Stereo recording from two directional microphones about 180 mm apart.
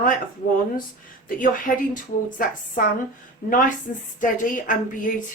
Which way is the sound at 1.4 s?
50° left (ahead or behind).